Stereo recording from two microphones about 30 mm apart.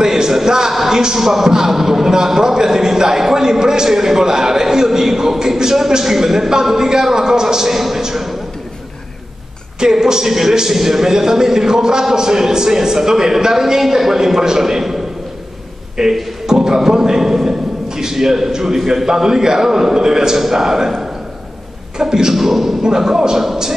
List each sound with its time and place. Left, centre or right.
0.0 s a sound: centre
0.7 s a man's voice: centre
9.8 s a man's voice: right
16.0 s a man's voice: centre
16.4 s a sound: centre
17.8 s a man's voice: centre
22.3 s a man's voice: centre
22.9 s a man's voice: centre